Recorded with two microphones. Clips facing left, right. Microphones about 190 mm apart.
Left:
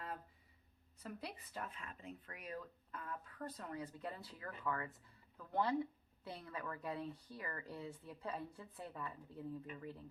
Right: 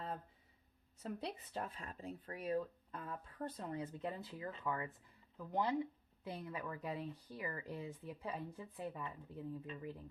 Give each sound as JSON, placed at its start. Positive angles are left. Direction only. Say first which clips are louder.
{"t": 1.0, "sound": "speech", "louder": "right 5 dB", "side_deg": -30}